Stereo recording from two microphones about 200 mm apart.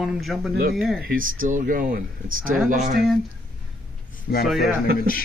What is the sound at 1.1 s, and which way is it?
Speech, 45° right (ahead or behind).